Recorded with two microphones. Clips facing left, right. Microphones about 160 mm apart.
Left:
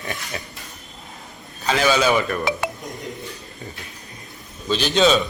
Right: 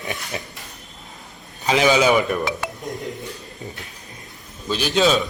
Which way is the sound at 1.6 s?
15° right (ahead or behind).